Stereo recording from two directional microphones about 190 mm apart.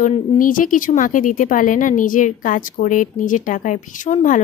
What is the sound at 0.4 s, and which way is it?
A woman's voice, 45° left (ahead or behind).